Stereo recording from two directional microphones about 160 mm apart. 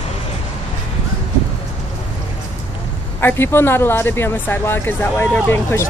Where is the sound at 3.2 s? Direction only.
15° left (ahead or behind).